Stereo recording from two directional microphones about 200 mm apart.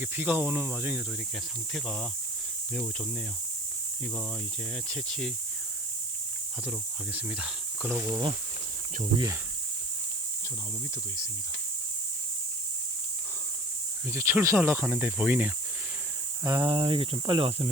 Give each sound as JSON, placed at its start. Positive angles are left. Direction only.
{"t": 0.0, "sound": "speech", "side_deg": -10}
{"t": 1.7, "sound": "speech", "side_deg": 5}
{"t": 4.9, "sound": "speech", "side_deg": 5}
{"t": 6.7, "sound": "speech", "side_deg": -5}
{"t": 8.0, "sound": "speech", "side_deg": -25}
{"t": 14.1, "sound": "speech", "side_deg": -15}